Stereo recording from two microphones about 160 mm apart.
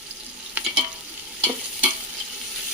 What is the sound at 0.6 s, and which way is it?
Stir, 10° right (ahead or behind).